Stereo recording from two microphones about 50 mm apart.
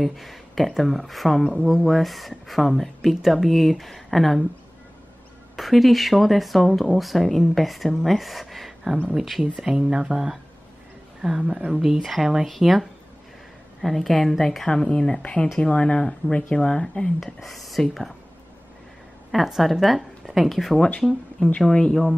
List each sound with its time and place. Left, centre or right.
0.0 s speech: centre
5.6 s speech: centre
9.4 s speech: centre
17.2 s speech: centre
19.3 s speech: centre
21.4 s speech: left